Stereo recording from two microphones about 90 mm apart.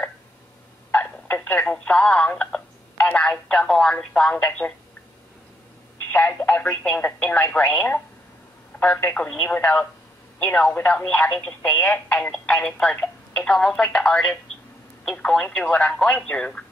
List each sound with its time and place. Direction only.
0.9 s speech: 15° left (ahead or behind)
6.1 s speech: 20° left (ahead or behind)